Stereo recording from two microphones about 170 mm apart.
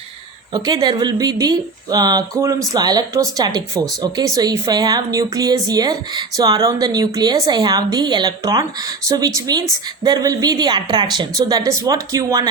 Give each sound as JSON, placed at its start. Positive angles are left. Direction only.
{"t": 0.5, "sound": "speech", "side_deg": -25}